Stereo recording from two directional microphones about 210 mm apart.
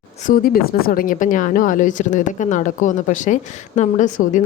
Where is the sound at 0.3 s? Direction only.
45° left (ahead or behind).